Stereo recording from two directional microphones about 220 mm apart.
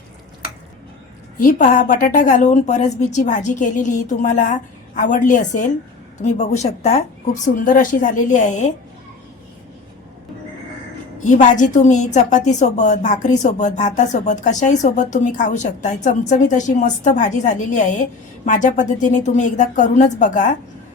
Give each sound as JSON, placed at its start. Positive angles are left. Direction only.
{"t": 1.4, "sound": "a woman's voice", "side_deg": 35}
{"t": 11.2, "sound": "a woman's voice", "side_deg": 35}